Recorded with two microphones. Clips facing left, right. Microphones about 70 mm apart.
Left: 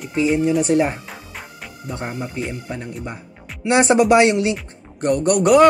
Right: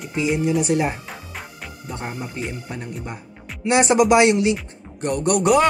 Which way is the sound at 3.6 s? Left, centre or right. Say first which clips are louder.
Left 2 dB; left.